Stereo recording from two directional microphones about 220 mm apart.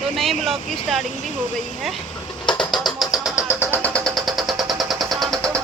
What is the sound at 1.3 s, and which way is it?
Speech, 35° right (ahead or behind).